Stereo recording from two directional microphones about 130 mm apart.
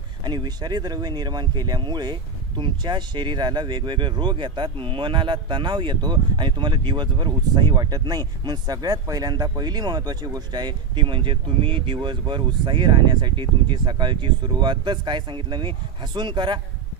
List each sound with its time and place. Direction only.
0.2 s speech: 35° right (ahead or behind)